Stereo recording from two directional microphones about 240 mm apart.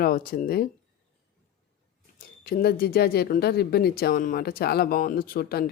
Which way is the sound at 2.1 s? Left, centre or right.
Left.